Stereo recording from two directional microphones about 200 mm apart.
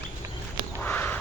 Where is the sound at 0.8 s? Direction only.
10° left (ahead or behind).